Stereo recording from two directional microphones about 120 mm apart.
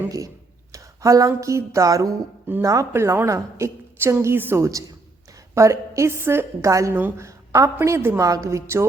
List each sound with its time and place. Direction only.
0.7 s a woman's voice: 25° right (ahead or behind)